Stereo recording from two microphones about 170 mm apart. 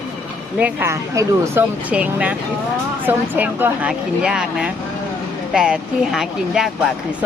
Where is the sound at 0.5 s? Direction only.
10° right (ahead or behind).